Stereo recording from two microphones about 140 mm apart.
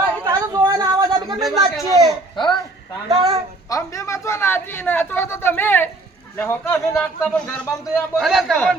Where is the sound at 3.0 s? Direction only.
45° right (ahead or behind).